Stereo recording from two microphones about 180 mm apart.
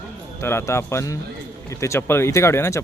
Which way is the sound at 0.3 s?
15° left (ahead or behind).